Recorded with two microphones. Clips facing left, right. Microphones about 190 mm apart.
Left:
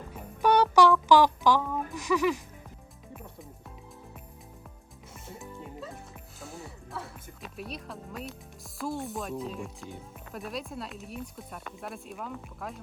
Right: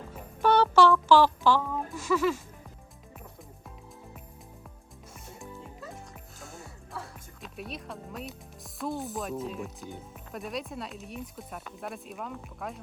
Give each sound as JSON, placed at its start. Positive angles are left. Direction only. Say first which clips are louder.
{"t": 0.4, "sound": "music", "louder": "even", "side_deg": 15}
{"t": 2.0, "sound": "speech", "louder": "even", "side_deg": 15}
{"t": 6.4, "sound": "music", "louder": "left 4 dB", "side_deg": 0}
{"t": 8.8, "sound": "speech", "louder": "even", "side_deg": 0}